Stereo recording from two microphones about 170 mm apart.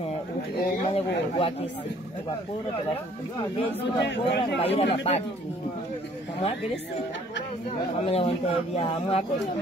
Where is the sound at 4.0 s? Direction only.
90° left.